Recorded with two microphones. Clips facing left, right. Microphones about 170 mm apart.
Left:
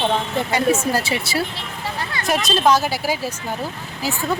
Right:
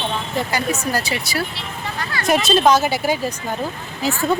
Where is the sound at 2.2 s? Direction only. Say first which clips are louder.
Right 3 dB; centre (ahead or behind).